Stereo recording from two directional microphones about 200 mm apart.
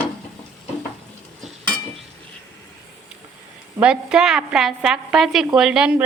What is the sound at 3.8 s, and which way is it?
A woman's voice, 5° right (ahead or behind).